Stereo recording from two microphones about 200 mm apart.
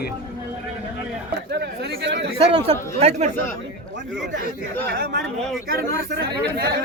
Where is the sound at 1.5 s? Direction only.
55° right (ahead or behind).